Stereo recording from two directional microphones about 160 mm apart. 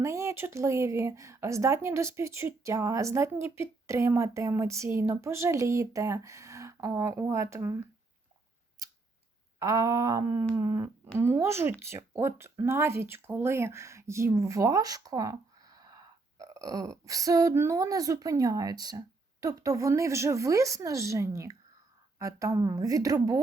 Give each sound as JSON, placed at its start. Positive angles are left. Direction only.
{"t": 0.0, "sound": "speech", "side_deg": -15}
{"t": 9.6, "sound": "speech", "side_deg": -20}